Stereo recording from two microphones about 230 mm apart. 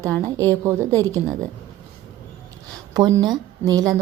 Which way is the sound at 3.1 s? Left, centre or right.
Centre.